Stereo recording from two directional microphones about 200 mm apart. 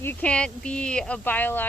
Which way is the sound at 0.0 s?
10° left (ahead or behind).